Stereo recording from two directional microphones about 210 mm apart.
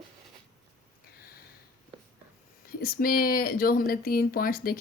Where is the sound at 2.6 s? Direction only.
45° left (ahead or behind).